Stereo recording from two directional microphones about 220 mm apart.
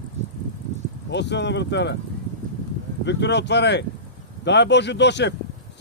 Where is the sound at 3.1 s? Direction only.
50° left (ahead or behind).